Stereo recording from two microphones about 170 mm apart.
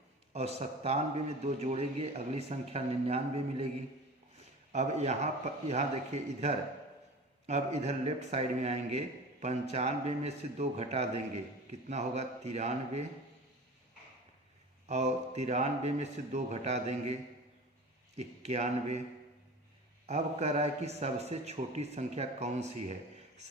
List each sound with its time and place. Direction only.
0.3 s a man's voice: 40° right (ahead or behind)
14.8 s a man's voice: 40° right (ahead or behind)
18.2 s a man's voice: 40° right (ahead or behind)
20.1 s a man's voice: 40° right (ahead or behind)